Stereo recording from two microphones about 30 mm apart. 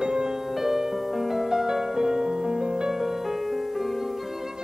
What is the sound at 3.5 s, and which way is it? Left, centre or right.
Music, centre.